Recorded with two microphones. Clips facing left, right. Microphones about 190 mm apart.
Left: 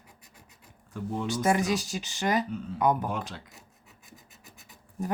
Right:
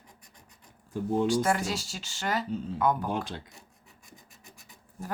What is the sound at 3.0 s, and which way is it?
Speech, 30° right (ahead or behind).